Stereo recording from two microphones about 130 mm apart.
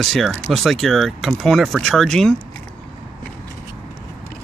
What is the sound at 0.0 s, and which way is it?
Speech, centre (ahead or behind).